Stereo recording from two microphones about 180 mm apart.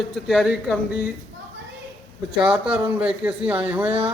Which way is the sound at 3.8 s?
30° right (ahead or behind).